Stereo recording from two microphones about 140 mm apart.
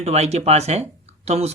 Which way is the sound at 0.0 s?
50° right (ahead or behind).